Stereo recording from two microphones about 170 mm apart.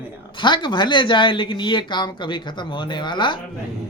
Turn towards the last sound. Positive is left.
turn(degrees=25)  # may be behind; listen again after turning